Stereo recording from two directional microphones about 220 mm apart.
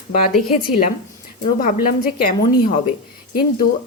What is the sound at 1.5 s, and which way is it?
Speech, 40° left (ahead or behind).